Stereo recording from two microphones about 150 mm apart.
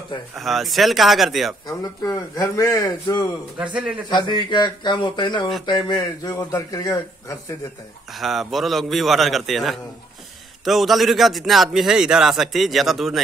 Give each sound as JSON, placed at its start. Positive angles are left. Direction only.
{"t": 0.4, "sound": "a man's voice", "side_deg": 0}
{"t": 1.7, "sound": "a man's voice", "side_deg": 25}
{"t": 3.5, "sound": "a man's voice", "side_deg": -10}
{"t": 4.1, "sound": "a man's voice", "side_deg": 30}
{"t": 8.1, "sound": "a man's voice", "side_deg": 0}